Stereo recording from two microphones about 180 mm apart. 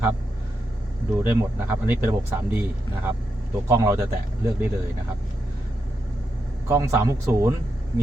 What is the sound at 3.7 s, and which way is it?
Speech, 15° right (ahead or behind).